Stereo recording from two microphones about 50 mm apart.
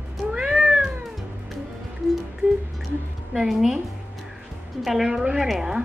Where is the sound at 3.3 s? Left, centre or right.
Centre.